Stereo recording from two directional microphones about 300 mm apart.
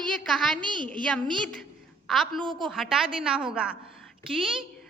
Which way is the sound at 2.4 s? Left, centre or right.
Centre.